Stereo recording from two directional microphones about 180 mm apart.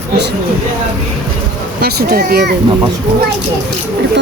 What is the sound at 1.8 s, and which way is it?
Speech, 60° right (ahead or behind).